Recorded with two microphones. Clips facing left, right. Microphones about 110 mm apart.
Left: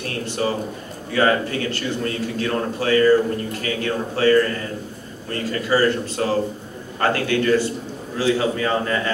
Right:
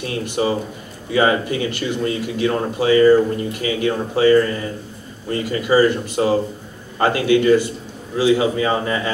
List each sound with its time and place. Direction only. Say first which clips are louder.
0.0 s a man's voice: right 3 dB; 15° right (ahead or behind)